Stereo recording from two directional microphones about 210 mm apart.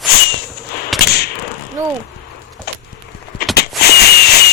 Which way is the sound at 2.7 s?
50° left (ahead or behind).